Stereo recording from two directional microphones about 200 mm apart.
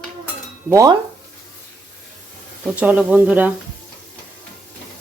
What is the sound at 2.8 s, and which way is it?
Cutlery, 5° right (ahead or behind).